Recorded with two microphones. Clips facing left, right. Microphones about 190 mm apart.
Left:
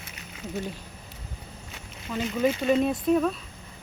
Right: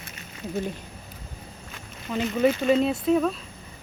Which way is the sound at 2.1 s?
20° right (ahead or behind).